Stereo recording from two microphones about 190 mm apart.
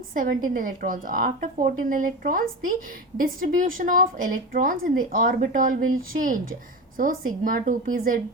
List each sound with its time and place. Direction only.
0.1 s speech: 45° right (ahead or behind)